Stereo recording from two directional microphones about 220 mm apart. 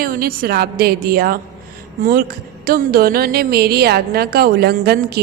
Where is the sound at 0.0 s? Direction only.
45° right (ahead or behind).